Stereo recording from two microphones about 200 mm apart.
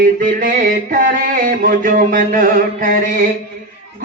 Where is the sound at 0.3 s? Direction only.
45° right (ahead or behind).